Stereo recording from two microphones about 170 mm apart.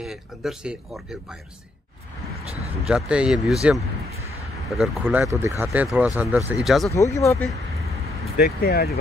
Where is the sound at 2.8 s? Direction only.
5° right (ahead or behind).